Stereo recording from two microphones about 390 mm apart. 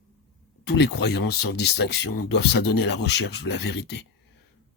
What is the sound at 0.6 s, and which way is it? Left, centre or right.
Speech, left.